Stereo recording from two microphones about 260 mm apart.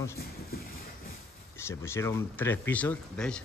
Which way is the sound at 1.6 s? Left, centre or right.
Centre.